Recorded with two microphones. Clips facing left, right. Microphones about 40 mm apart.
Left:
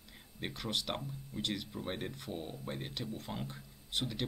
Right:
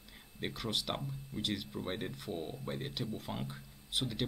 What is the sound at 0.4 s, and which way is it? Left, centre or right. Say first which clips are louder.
Speech: right 1 dB; centre.